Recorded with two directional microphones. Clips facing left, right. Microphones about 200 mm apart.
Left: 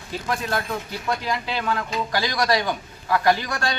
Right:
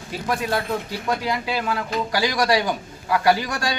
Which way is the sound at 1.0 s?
10° right (ahead or behind).